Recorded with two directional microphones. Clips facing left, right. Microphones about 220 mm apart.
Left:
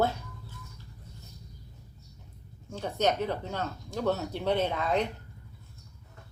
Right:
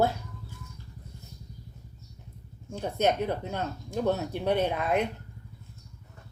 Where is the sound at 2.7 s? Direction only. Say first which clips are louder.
Right 2 dB; 15° right (ahead or behind).